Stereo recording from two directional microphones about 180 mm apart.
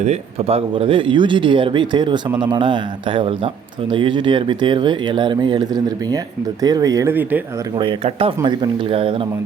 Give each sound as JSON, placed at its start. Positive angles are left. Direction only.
{"t": 0.0, "sound": "speech", "side_deg": -35}
{"t": 7.8, "sound": "speech", "side_deg": -30}